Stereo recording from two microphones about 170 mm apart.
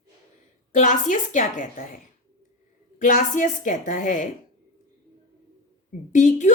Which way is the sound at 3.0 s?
50° left (ahead or behind).